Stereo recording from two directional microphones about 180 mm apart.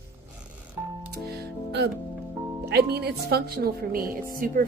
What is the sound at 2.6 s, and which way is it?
Speech, 60° right (ahead or behind).